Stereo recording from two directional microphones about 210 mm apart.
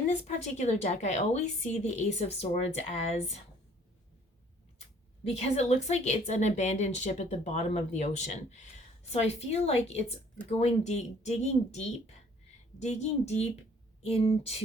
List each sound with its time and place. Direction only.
0.1 s a woman's voice: 30° left (ahead or behind)
5.3 s a woman's voice: 30° left (ahead or behind)